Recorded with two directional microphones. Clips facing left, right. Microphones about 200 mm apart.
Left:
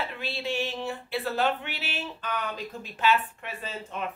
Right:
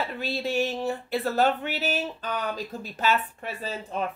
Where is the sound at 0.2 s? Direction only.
40° right (ahead or behind).